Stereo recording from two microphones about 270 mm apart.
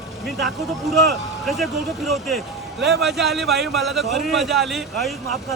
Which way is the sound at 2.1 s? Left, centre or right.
Centre.